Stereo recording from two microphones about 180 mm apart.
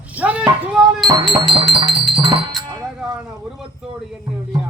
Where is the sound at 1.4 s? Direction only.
30° right (ahead or behind).